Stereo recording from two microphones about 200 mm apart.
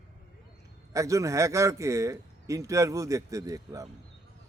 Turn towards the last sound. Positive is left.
turn(degrees=-15)  # may be behind; listen again after turning